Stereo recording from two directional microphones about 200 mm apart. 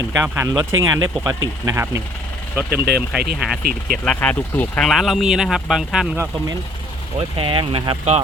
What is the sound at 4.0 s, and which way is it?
Speech, 5° left (ahead or behind).